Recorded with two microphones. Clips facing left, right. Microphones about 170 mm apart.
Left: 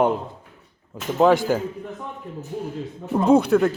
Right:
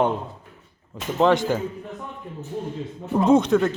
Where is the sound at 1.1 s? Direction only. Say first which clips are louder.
Left 2 dB; 5° left (ahead or behind).